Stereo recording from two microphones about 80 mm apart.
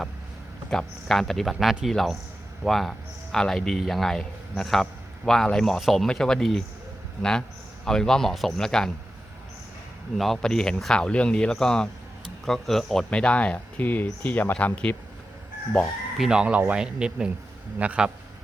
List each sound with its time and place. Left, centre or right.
0.7 s a man's voice: centre
10.2 s a man's voice: centre
13.1 s speech: centre
16.1 s speech: centre